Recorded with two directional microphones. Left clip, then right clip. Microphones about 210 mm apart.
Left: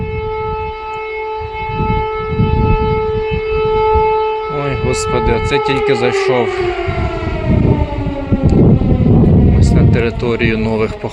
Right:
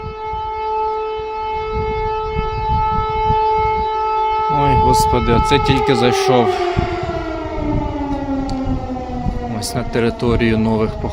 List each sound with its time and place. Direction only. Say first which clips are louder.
4.5 s speech: right 4 dB; 15° right (ahead or behind)
9.7 s speech: right 1 dB; 15° right (ahead or behind)